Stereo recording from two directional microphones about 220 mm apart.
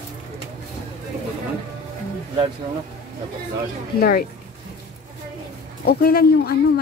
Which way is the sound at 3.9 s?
45° left (ahead or behind).